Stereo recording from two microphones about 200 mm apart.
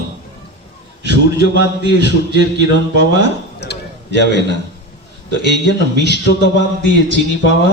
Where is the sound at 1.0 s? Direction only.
55° left (ahead or behind).